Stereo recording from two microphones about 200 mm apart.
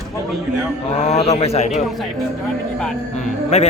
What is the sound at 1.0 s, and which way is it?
Speech, 30° left (ahead or behind).